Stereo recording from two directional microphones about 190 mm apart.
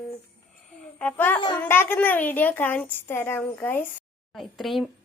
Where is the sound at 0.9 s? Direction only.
10° left (ahead or behind).